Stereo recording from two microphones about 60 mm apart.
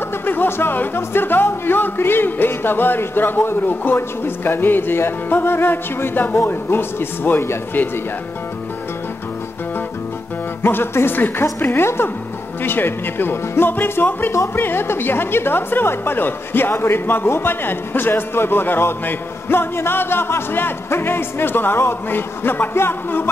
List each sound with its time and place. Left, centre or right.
0.2 s a woman's voice: left
10.6 s a woman's voice: left